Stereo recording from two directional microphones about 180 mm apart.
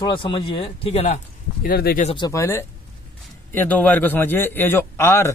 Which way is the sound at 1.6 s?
55° left (ahead or behind).